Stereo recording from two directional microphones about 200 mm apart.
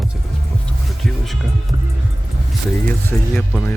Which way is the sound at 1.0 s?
Centre (ahead or behind).